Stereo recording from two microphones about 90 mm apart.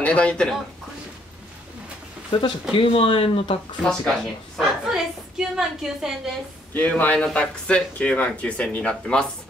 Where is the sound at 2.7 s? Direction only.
85° left.